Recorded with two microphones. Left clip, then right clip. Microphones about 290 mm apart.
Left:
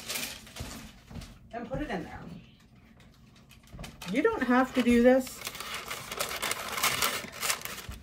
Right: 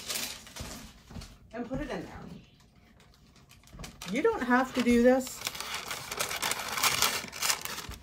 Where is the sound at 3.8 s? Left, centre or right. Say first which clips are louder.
Left 2 dB; centre.